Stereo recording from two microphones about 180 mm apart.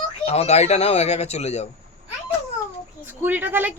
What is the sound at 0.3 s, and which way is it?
Speech, 35° left (ahead or behind).